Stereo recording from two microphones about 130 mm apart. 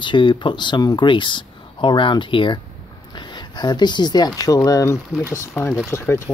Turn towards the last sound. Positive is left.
turn(degrees=20)  # may be behind; listen again after turning